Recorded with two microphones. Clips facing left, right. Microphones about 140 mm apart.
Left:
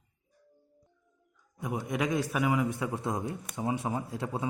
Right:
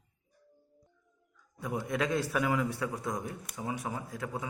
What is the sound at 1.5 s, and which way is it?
A man's voice, 15° left (ahead or behind).